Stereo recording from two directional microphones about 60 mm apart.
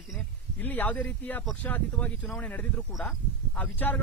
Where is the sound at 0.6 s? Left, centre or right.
Left.